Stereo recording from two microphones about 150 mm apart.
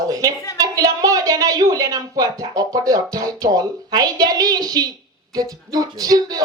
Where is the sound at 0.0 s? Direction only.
25° right (ahead or behind).